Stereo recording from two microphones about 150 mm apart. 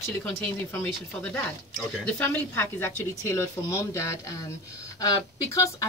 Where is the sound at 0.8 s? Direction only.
15° left (ahead or behind).